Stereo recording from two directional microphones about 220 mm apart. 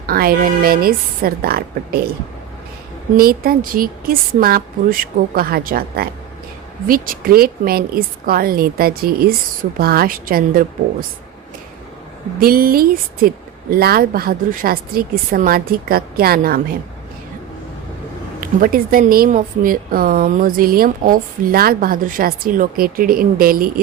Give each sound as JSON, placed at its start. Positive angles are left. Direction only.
{"t": 0.1, "sound": "a woman's voice", "side_deg": -40}
{"t": 3.2, "sound": "a woman's voice", "side_deg": -40}
{"t": 12.4, "sound": "speech", "side_deg": -40}
{"t": 18.3, "sound": "speech", "side_deg": -40}